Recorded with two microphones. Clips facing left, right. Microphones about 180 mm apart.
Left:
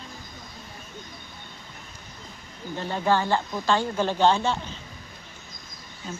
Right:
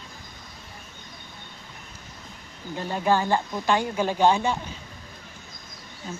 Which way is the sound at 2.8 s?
15° right (ahead or behind).